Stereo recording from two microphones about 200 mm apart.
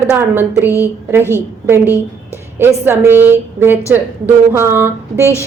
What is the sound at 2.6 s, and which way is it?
A woman's voice, 10° right (ahead or behind).